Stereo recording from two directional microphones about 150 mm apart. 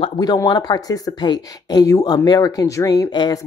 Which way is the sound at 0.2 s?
25° left (ahead or behind).